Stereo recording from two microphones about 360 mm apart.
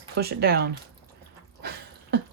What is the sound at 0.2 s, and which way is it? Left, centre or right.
Speech, right.